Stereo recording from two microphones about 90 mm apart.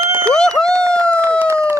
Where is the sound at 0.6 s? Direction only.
35° right (ahead or behind).